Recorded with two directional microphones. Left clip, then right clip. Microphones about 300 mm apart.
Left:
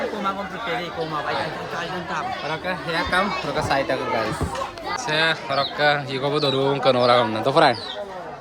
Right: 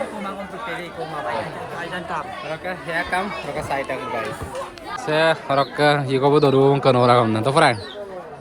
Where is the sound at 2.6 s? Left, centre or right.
Centre.